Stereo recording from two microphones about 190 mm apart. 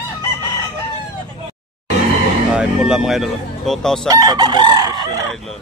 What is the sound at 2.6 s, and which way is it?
Speech, 5° right (ahead or behind).